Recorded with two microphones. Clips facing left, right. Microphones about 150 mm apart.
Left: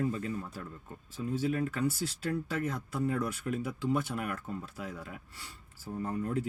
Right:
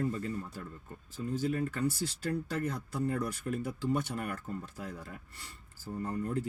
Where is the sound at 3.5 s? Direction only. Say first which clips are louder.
Left 1 dB; 5° left (ahead or behind).